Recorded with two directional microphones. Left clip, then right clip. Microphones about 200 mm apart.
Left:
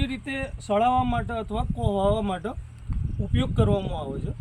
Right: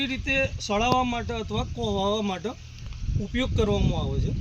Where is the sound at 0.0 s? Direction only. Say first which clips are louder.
Right 6 dB; centre (ahead or behind).